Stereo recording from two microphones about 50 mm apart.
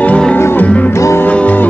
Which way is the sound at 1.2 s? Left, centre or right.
Left.